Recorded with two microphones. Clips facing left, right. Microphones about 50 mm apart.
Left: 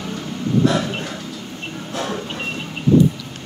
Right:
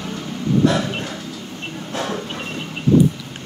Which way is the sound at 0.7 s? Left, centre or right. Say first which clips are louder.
Even; centre.